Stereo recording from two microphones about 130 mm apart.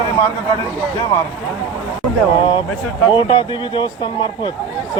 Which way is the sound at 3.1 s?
40° left (ahead or behind).